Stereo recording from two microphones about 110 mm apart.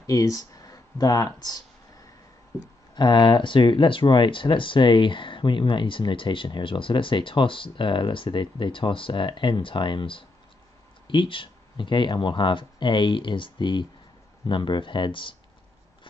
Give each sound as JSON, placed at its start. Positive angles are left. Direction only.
{"t": 0.0, "sound": "speech", "side_deg": 30}
{"t": 2.9, "sound": "speech", "side_deg": 45}